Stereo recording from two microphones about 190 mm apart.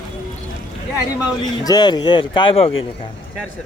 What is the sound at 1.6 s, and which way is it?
Speech, 20° left (ahead or behind).